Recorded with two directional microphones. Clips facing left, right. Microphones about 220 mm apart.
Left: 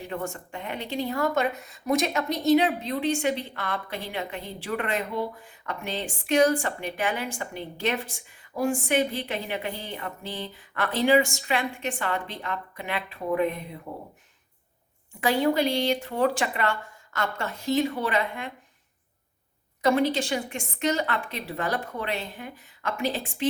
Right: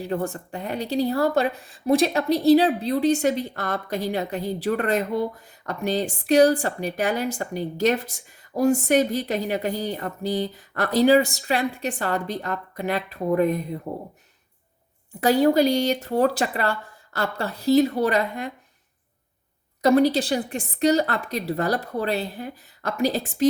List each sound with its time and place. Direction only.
0.0 s speech: 35° right (ahead or behind)
15.2 s speech: 40° right (ahead or behind)
19.8 s speech: 40° right (ahead or behind)